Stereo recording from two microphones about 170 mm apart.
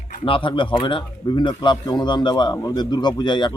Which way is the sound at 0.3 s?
30° left (ahead or behind).